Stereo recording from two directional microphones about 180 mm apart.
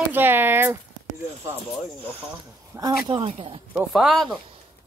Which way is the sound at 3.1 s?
30° right (ahead or behind).